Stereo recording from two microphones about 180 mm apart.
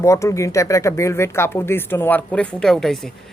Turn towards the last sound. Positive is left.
turn(degrees=0)  # may be behind; listen again after turning